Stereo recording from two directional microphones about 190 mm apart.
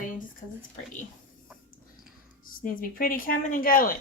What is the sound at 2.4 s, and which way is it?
Speech, 50° left (ahead or behind).